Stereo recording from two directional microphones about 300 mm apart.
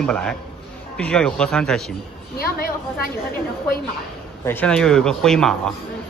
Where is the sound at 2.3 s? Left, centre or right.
Left.